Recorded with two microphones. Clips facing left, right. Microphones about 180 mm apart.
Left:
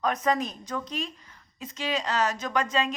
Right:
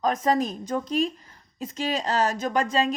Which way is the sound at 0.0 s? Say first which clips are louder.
Right 3 dB; 40° right (ahead or behind).